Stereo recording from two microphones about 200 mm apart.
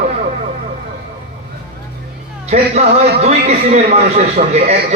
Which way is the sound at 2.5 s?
35° right (ahead or behind).